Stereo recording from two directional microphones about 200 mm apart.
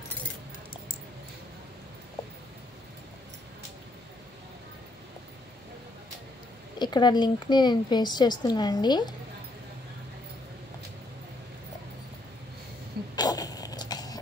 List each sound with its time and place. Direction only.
6.8 s speech: 20° left (ahead or behind)
13.1 s zipper: 20° left (ahead or behind)